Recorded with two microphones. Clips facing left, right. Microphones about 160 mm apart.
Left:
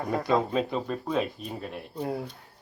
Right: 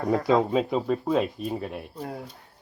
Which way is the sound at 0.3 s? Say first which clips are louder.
Right 2 dB; 15° right (ahead or behind).